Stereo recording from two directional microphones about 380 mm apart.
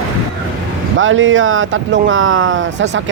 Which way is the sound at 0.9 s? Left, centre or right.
Right.